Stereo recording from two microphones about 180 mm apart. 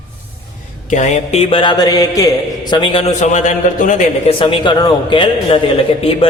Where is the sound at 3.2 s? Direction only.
40° left (ahead or behind).